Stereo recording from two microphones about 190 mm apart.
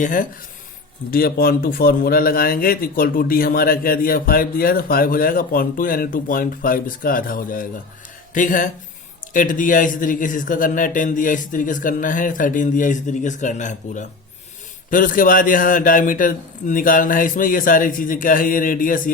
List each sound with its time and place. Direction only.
0.0 s a man's voice: 45° left (ahead or behind)